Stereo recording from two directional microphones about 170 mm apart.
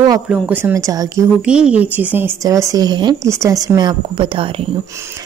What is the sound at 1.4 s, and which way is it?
A woman's voice, 5° right (ahead or behind).